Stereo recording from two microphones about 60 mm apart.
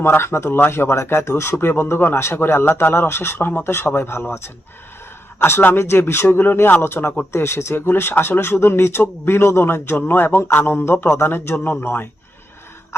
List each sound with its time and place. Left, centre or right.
0.0 s speech: left
1.5 s a man's voice: left
3.6 s a man's voice: left